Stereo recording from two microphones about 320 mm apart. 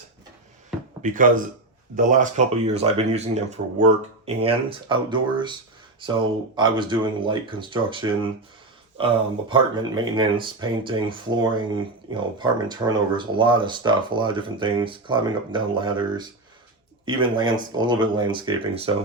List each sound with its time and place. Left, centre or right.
1.0 s speech: right